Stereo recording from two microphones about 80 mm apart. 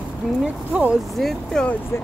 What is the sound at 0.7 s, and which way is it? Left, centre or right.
Speech, centre.